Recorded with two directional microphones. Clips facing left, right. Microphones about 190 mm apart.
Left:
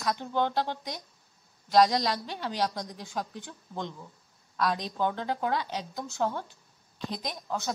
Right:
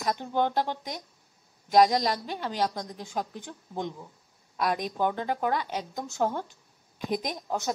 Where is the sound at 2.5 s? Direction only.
50° right (ahead or behind).